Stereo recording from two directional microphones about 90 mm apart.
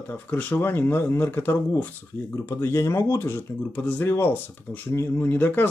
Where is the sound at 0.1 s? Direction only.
20° left (ahead or behind).